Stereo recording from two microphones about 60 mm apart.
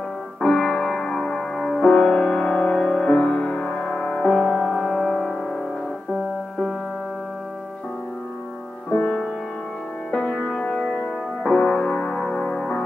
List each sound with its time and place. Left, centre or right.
0.5 s music: centre
1.8 s music: centre
8.9 s music: left